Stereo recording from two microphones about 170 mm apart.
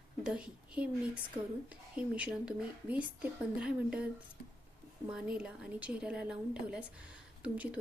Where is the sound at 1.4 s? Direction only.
30° right (ahead or behind).